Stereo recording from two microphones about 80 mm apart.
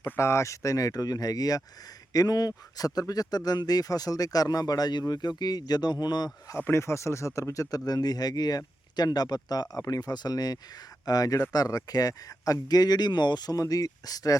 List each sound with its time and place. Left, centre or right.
0.0 s a man's voice: left
6.6 s speech: left